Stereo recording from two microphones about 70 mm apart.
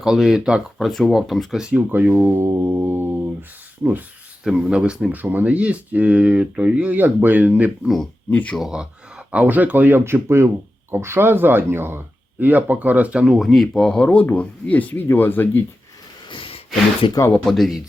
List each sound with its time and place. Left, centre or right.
0.0 s speech: centre
0.9 s speech: centre
1.9 s speech: right
2.3 s mantra: right
3.8 s speech: right
6.9 s speech: right
8.3 s speech: left
8.5 s speech: centre
13.4 s speech: centre
13.8 s speech: centre
17.4 s speech: centre